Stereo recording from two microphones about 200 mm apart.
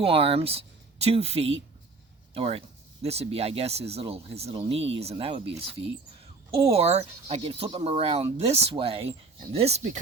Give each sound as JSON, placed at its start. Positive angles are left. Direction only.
{"t": 0.0, "sound": "speech", "side_deg": -30}
{"t": 6.6, "sound": "speech", "side_deg": -30}